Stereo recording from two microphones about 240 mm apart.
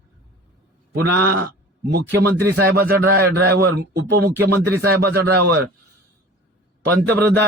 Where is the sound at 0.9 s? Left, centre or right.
Right.